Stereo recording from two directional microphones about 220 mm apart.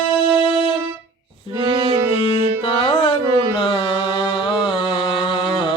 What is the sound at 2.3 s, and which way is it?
Music, 25° left (ahead or behind).